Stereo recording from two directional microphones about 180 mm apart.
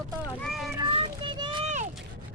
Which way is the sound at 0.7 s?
25° right (ahead or behind).